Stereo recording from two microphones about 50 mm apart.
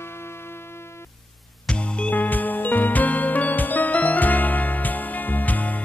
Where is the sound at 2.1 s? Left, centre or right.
Left.